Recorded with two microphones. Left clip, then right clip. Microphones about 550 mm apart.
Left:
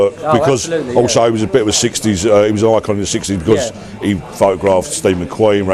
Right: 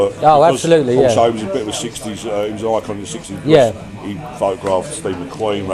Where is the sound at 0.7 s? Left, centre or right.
Right.